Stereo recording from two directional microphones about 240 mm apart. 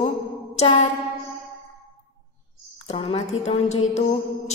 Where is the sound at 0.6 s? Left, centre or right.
Left.